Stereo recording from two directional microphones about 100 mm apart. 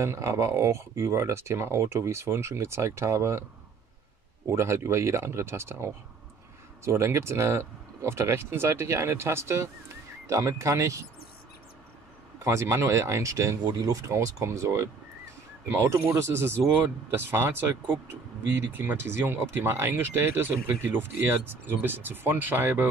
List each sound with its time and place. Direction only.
0.0 s speech: 30° right (ahead or behind)
4.5 s speech: 25° right (ahead or behind)
12.4 s speech: 30° right (ahead or behind)